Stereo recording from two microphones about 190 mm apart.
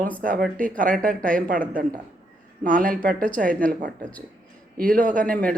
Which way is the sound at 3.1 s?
45° right (ahead or behind).